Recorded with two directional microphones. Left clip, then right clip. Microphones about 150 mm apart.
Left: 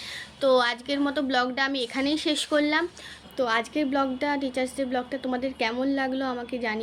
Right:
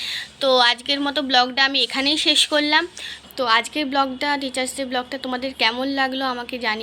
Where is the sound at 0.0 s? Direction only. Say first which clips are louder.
Right 4 dB; 15° left (ahead or behind).